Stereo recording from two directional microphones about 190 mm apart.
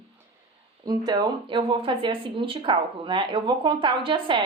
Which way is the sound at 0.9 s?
20° right (ahead or behind).